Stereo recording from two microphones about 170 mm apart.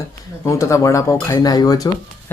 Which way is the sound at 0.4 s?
15° left (ahead or behind).